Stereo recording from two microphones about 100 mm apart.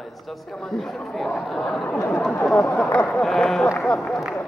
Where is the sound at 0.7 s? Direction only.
5° left (ahead or behind).